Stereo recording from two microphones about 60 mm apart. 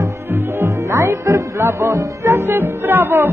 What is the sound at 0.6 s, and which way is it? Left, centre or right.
Music, right.